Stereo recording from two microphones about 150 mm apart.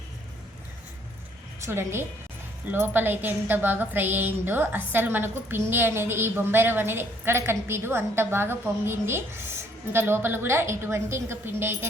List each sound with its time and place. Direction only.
1.6 s a woman's voice: 15° right (ahead or behind)